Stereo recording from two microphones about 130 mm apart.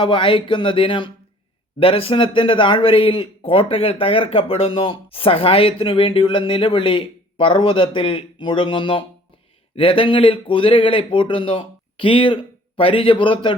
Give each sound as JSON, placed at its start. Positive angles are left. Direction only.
{"t": 0.0, "sound": "speech", "side_deg": 40}